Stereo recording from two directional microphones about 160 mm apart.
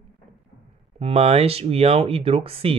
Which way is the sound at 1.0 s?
40° right (ahead or behind).